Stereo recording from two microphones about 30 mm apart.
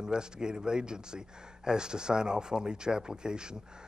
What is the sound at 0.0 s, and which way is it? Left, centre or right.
Speech, right.